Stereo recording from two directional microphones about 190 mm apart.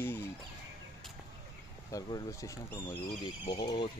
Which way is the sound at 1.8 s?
15° left (ahead or behind).